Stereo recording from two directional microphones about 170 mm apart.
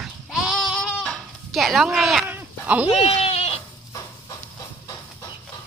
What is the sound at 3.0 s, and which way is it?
Goat, 35° left (ahead or behind).